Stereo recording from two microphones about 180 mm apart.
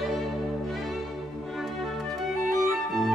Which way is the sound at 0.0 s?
Centre (ahead or behind).